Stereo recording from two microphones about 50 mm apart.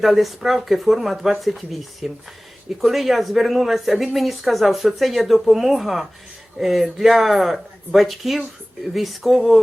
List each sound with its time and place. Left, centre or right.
0.0 s speech: centre